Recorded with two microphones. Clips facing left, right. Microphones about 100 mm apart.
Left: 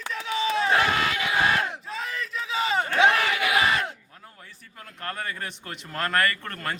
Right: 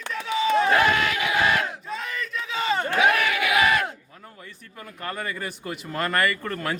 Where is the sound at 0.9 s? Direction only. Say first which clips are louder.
Right 2 dB; 30° left (ahead or behind).